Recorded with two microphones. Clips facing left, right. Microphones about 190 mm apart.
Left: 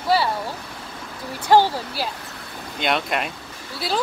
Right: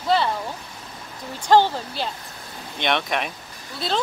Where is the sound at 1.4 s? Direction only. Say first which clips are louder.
Left 1 dB; 10° left (ahead or behind).